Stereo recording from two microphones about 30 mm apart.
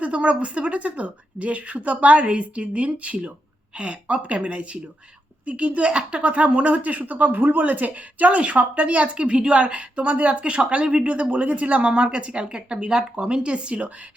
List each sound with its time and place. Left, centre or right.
0.0 s speech: right
2.2 s speech: right
3.8 s speech: right
9.1 s speech: right
10.0 s speech: right
11.0 s speech: right